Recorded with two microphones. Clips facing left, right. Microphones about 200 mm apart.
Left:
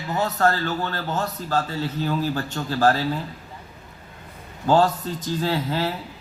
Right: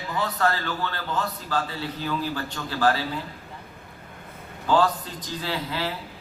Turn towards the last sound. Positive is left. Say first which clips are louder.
# left 5 dB
turn(degrees=45)  # may be behind; listen again after turning